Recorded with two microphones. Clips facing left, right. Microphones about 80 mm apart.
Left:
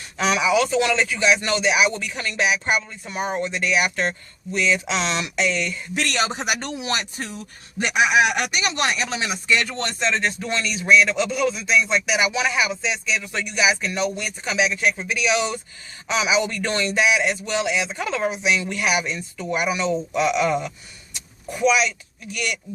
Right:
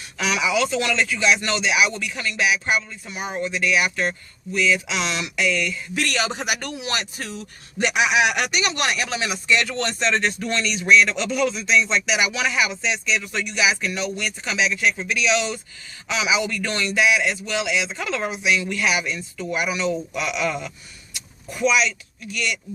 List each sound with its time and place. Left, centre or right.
0.2 s speech: left
9.5 s speech: centre
12.2 s speech: left
12.8 s speech: centre
13.3 s speech: centre
21.6 s speech: centre